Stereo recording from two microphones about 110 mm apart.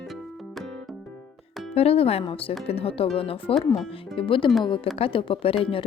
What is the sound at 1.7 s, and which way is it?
Speech, 65° left (ahead or behind).